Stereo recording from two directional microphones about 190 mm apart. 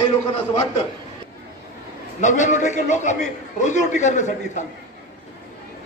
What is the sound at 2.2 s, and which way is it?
A man's voice, 40° left (ahead or behind).